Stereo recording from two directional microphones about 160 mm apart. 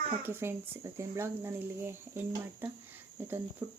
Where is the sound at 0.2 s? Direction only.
15° right (ahead or behind).